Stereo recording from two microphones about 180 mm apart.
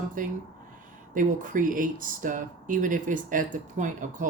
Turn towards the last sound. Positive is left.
turn(degrees=-45)  # may be behind; listen again after turning